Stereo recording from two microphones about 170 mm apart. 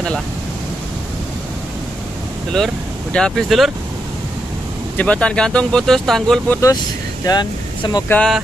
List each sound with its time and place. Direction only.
2.5 s speech: 5° left (ahead or behind)
4.9 s speech: 10° left (ahead or behind)
7.2 s speech: 25° left (ahead or behind)
8.1 s speech: 5° left (ahead or behind)